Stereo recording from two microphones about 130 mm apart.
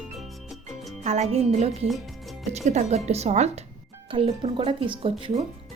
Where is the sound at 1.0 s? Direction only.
60° right (ahead or behind).